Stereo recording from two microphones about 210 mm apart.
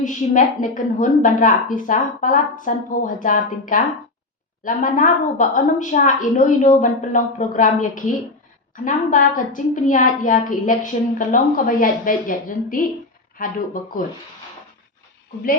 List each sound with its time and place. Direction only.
0.0 s a woman's voice: 35° left (ahead or behind)